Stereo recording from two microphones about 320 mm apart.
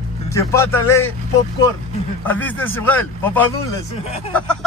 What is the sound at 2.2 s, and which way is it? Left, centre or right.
Speech, centre.